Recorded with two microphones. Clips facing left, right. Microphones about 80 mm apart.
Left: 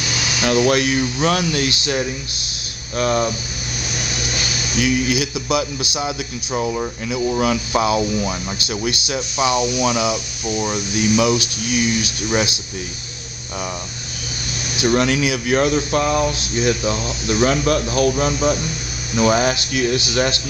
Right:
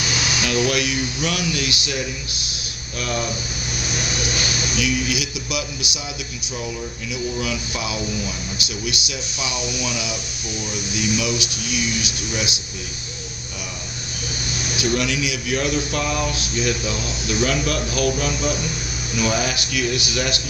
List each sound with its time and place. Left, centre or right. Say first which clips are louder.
0.4 s speech: left 6 dB; left
4.8 s speech: left 6 dB; left
6.5 s speech: left 8 dB; left
8.5 s speech: left 4 dB; left
9.1 s speech: left 10 dB; left
14.8 s speech: left 6 dB; left